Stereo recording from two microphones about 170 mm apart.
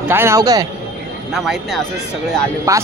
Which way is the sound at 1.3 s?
Centre (ahead or behind).